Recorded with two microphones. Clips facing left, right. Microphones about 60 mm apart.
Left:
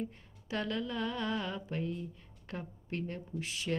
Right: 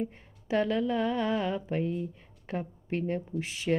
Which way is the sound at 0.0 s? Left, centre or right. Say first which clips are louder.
Right 6 dB; right.